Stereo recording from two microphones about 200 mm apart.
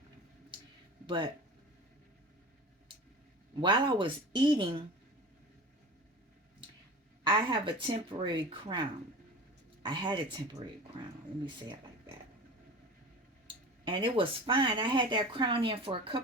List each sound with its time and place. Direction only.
1.0 s speech: 25° right (ahead or behind)
3.6 s speech: 25° right (ahead or behind)
7.3 s speech: 25° right (ahead or behind)
9.8 s speech: 25° right (ahead or behind)
13.8 s speech: 25° right (ahead or behind)